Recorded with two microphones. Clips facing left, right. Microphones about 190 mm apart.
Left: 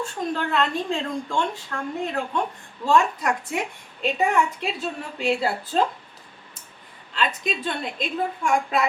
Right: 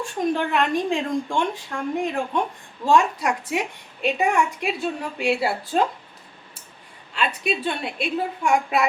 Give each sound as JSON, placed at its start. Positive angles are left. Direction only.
{"t": 0.0, "sound": "a woman's voice", "side_deg": -15}
{"t": 7.2, "sound": "a woman's voice", "side_deg": -10}